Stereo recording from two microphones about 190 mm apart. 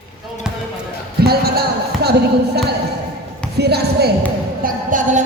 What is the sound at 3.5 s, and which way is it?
Speech, 60° right (ahead or behind).